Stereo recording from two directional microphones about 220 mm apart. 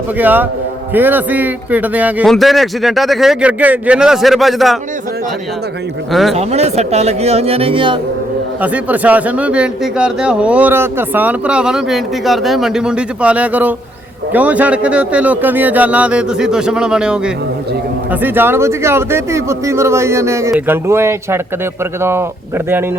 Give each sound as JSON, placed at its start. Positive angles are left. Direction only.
{"t": 0.2, "sound": "a man's voice", "side_deg": -10}
{"t": 6.1, "sound": "speech", "side_deg": 0}
{"t": 6.3, "sound": "speech", "side_deg": -30}
{"t": 8.6, "sound": "a man's voice", "side_deg": -5}